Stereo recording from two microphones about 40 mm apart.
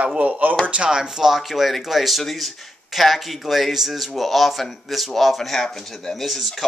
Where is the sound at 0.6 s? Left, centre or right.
Right.